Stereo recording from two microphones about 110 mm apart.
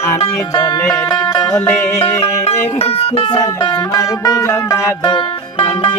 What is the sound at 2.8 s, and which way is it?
Speech, 65° left (ahead or behind).